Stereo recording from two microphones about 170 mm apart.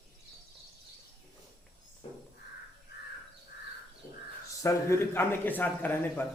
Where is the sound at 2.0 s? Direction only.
35° left (ahead or behind).